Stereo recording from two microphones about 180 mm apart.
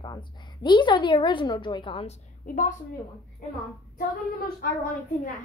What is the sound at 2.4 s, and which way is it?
Speech, 50° left (ahead or behind).